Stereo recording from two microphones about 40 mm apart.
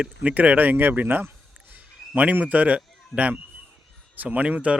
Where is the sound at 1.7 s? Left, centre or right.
Right.